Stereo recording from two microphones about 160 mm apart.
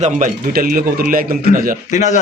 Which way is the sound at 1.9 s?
50° left (ahead or behind).